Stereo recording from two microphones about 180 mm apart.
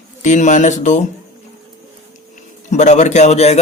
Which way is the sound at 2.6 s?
40° left (ahead or behind).